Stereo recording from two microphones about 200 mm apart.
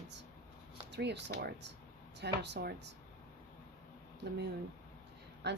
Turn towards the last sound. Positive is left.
turn(degrees=-55)  # may be behind; listen again after turning